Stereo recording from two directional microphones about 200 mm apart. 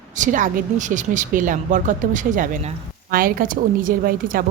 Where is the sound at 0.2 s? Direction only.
40° right (ahead or behind).